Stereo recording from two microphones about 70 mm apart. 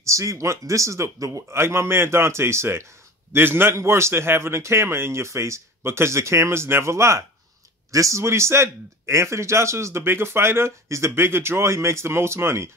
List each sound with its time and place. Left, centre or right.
0.0 s a man's voice: right